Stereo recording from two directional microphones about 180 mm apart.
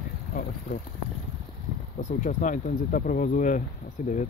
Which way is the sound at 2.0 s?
45° left (ahead or behind).